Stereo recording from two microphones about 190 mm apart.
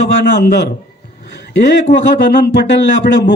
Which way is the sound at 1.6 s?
70° left (ahead or behind).